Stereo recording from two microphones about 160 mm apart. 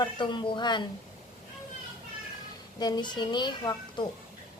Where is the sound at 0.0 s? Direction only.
30° left (ahead or behind).